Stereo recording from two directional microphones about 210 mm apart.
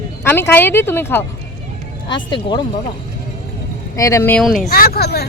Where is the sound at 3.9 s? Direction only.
15° left (ahead or behind).